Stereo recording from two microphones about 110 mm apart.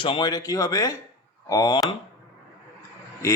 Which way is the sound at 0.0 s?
50° left (ahead or behind).